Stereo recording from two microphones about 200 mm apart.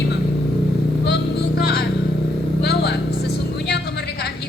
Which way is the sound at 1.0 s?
55° left (ahead or behind).